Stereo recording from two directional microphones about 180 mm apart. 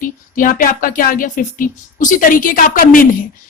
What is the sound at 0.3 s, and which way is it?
A woman's voice, 50° left (ahead or behind).